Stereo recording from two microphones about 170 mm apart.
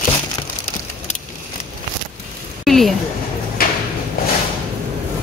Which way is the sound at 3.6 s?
60° left (ahead or behind).